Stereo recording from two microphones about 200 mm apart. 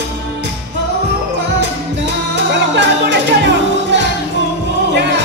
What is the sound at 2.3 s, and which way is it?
Music, 60° right (ahead or behind).